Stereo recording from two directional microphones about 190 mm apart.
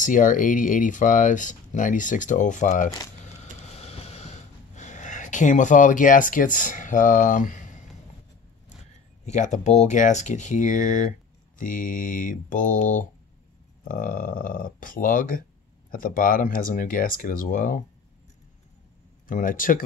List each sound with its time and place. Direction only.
0.0 s speech: 45° left (ahead or behind)
3.6 s a sound: 35° left (ahead or behind)
9.2 s speech: 40° left (ahead or behind)
19.2 s speech: 45° left (ahead or behind)